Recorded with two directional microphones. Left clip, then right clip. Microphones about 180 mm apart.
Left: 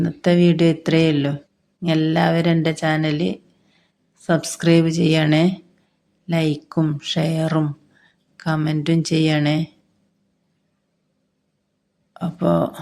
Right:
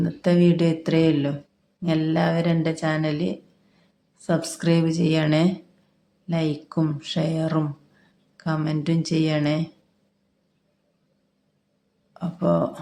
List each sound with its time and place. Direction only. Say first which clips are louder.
0.0 s a woman's voice: left 3 dB; 15° left (ahead or behind)
12.2 s a woman's voice: left 3 dB; 15° left (ahead or behind)